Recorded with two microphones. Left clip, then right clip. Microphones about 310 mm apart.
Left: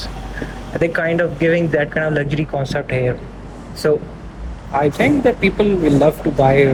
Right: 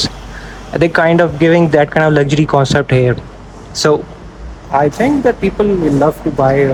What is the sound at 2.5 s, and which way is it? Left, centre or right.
Speech, right.